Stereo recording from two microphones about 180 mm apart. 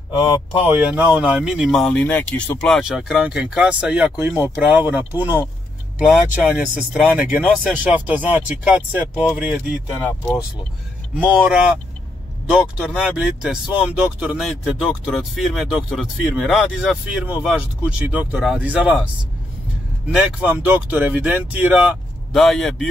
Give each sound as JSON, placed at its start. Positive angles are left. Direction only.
{"t": 0.1, "sound": "speech", "side_deg": 25}
{"t": 0.7, "sound": "speech", "side_deg": -10}
{"t": 11.1, "sound": "speech", "side_deg": -5}
{"t": 20.1, "sound": "speech", "side_deg": -5}